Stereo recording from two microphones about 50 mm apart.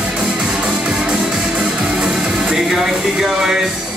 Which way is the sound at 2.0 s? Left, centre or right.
Centre.